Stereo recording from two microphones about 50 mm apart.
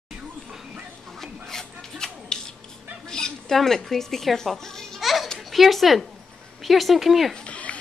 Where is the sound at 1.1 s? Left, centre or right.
Centre.